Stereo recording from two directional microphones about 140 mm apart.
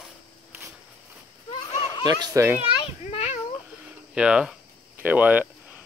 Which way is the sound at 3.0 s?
50° left (ahead or behind).